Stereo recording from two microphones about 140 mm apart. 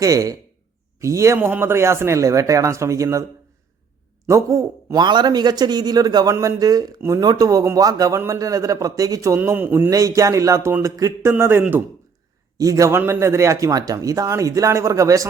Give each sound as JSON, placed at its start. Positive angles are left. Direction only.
{"t": 0.0, "sound": "speech", "side_deg": -25}
{"t": 4.3, "sound": "speech", "side_deg": -20}